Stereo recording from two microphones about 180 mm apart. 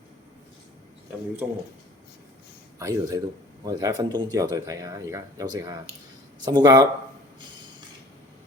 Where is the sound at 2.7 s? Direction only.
20° right (ahead or behind).